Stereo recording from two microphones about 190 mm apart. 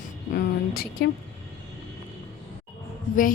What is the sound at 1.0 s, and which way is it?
Speech, 60° left (ahead or behind).